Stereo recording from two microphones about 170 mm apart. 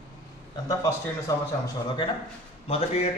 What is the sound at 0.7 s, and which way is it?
A man's voice, 15° left (ahead or behind).